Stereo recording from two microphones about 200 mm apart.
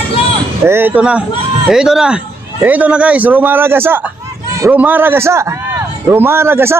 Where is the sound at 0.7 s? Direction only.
10° right (ahead or behind).